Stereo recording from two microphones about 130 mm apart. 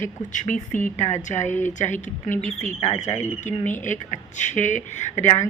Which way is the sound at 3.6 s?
75° left (ahead or behind).